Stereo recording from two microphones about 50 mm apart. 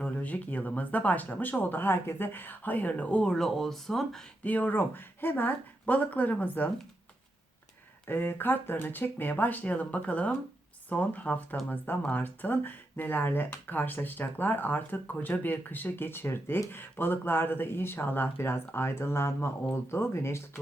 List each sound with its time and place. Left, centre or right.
0.0 s speech: left
3.2 s speech: centre
4.4 s speech: left
8.0 s speech: left
9.3 s speech: left